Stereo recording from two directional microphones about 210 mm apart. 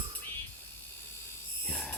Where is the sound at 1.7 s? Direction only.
5° left (ahead or behind).